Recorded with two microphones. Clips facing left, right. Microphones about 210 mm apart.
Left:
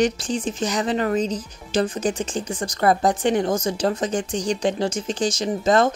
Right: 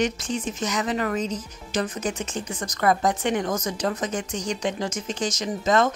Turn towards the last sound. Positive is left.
turn(degrees=30)  # may be behind; listen again after turning